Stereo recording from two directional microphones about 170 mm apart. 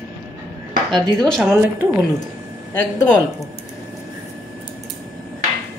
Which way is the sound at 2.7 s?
15° left (ahead or behind).